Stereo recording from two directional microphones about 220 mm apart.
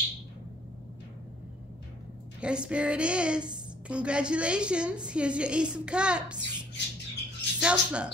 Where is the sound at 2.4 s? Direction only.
5° right (ahead or behind).